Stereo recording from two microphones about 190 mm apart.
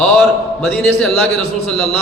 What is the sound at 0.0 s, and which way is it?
A man's voice, 5° left (ahead or behind).